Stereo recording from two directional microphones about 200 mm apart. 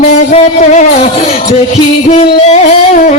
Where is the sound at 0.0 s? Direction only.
35° left (ahead or behind).